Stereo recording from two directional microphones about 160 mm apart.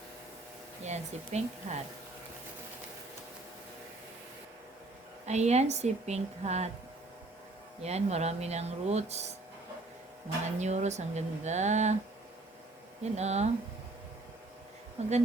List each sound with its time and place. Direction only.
0.9 s speech: 45° right (ahead or behind)
5.2 s speech: 45° right (ahead or behind)
7.8 s speech: 40° right (ahead or behind)
10.6 s speech: 45° right (ahead or behind)
13.1 s speech: 45° right (ahead or behind)
15.0 s speech: 45° right (ahead or behind)